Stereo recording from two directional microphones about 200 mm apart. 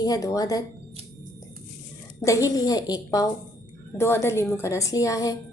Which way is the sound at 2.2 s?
15° left (ahead or behind).